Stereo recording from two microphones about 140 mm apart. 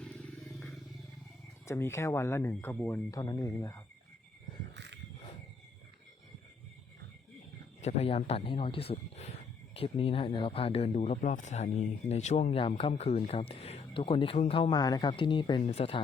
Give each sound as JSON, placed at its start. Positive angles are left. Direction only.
{"t": 0.0, "sound": "vehicle", "side_deg": 5}
{"t": 1.6, "sound": "speech", "side_deg": 20}
{"t": 7.8, "sound": "speech", "side_deg": 50}
{"t": 15.6, "sound": "speech", "side_deg": 45}